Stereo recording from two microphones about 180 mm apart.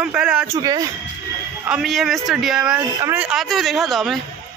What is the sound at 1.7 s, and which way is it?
Speech, centre (ahead or behind).